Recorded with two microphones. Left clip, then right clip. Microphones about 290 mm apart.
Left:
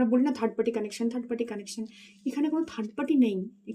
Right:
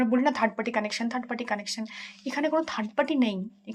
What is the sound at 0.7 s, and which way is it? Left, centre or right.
Speech, centre.